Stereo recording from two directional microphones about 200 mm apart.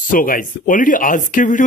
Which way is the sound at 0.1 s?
45° left (ahead or behind).